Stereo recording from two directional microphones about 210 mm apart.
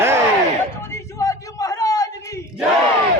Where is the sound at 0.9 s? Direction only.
15° left (ahead or behind).